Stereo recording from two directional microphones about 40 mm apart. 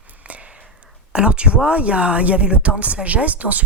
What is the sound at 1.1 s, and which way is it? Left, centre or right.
Speech, right.